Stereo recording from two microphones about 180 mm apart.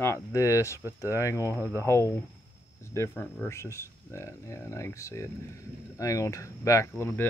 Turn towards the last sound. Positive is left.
turn(degrees=10)  # may be behind; listen again after turning